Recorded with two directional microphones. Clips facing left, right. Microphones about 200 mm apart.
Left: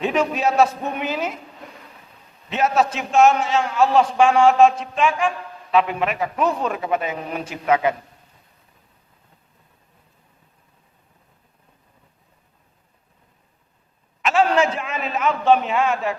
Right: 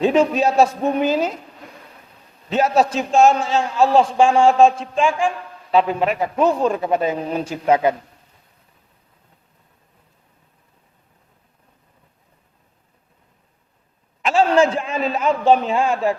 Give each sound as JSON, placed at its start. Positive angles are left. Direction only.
{"t": 0.0, "sound": "a man's voice", "side_deg": -30}
{"t": 2.5, "sound": "a man's voice", "side_deg": -30}
{"t": 14.2, "sound": "a man's voice", "side_deg": -30}